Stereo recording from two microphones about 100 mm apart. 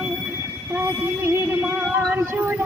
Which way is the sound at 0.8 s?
20° right (ahead or behind).